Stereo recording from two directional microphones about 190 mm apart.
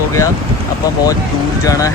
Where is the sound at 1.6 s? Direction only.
15° left (ahead or behind).